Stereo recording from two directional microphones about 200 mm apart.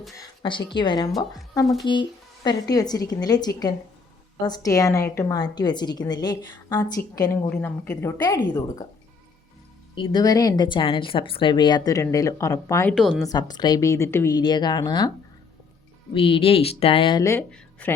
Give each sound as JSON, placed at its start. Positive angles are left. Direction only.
{"t": 0.2, "sound": "a woman's voice", "side_deg": 25}
{"t": 9.9, "sound": "speech", "side_deg": 25}
{"t": 12.9, "sound": "a woman's voice", "side_deg": 5}
{"t": 13.2, "sound": "speech", "side_deg": 20}
{"t": 16.1, "sound": "speech", "side_deg": 25}